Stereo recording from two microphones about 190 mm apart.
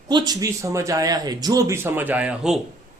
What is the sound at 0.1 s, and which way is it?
A man's voice, 20° right (ahead or behind).